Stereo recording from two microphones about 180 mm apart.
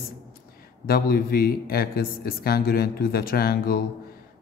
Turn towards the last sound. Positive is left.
turn(degrees=55)  # may be behind; listen again after turning